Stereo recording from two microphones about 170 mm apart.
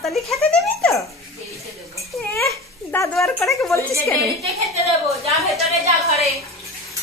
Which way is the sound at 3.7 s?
15° left (ahead or behind).